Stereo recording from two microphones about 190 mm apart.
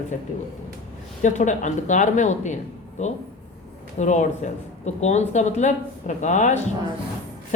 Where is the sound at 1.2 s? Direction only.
40° left (ahead or behind).